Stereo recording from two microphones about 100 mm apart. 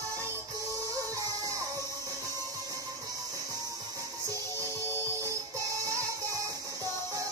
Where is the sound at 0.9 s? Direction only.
35° right (ahead or behind).